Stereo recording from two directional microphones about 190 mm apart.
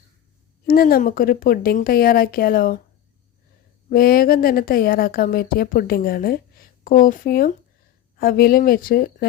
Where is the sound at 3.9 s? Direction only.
50° left (ahead or behind).